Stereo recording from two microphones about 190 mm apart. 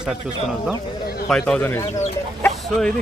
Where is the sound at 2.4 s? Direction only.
10° left (ahead or behind).